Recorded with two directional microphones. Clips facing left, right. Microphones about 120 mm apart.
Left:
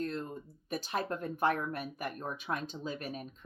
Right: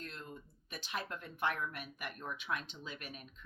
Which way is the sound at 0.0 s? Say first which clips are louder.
Left 11 dB; 40° left (ahead or behind).